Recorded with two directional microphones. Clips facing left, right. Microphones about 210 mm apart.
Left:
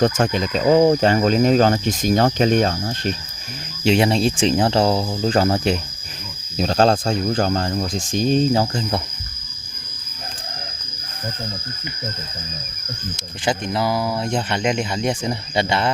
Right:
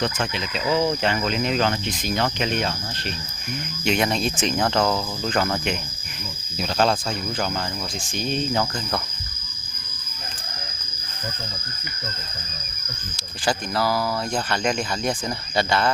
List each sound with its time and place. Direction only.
0.0 s speech: 45° left (ahead or behind)
3.8 s speech: 30° left (ahead or behind)
13.1 s speech: 20° left (ahead or behind)